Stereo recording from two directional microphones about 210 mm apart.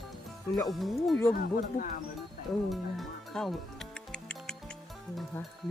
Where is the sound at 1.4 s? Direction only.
40° left (ahead or behind).